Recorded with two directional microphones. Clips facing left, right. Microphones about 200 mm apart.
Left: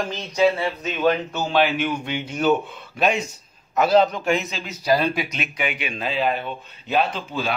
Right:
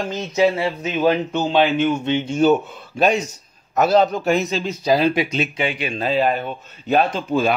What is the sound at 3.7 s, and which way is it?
Speech, 45° right (ahead or behind).